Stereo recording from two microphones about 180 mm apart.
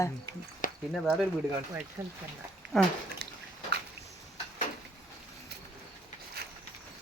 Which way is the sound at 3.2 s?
70° right (ahead or behind).